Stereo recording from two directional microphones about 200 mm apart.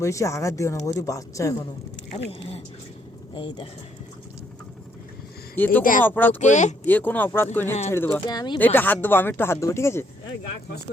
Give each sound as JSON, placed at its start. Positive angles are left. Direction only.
{"t": 0.0, "sound": "speech", "side_deg": 15}
{"t": 3.3, "sound": "speech", "side_deg": 25}
{"t": 5.8, "sound": "speech", "side_deg": 40}
{"t": 6.1, "sound": "speech", "side_deg": 10}
{"t": 6.4, "sound": "speech", "side_deg": 35}
{"t": 6.8, "sound": "speech", "side_deg": 10}
{"t": 8.5, "sound": "speech", "side_deg": 10}